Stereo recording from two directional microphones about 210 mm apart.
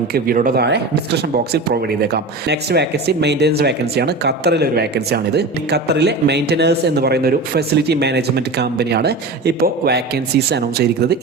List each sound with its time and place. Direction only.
0.1 s speech: 45° right (ahead or behind)